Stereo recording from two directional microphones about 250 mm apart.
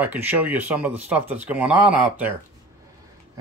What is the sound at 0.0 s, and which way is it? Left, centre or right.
Speech, centre.